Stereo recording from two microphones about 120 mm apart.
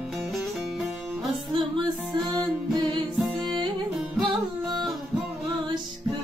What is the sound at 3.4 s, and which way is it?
Music, 40° right (ahead or behind).